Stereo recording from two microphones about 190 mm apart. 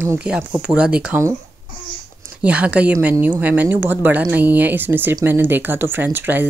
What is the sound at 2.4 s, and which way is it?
A woman's voice, 5° right (ahead or behind).